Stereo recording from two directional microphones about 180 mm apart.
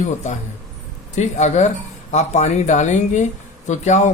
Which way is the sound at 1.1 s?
40° left (ahead or behind).